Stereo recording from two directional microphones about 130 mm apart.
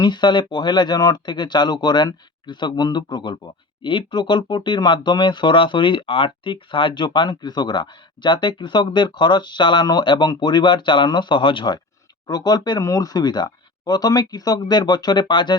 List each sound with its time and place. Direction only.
0.0 s speech: 35° left (ahead or behind)